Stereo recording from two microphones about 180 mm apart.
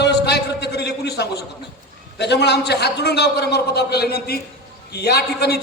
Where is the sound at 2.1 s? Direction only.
70° left (ahead or behind).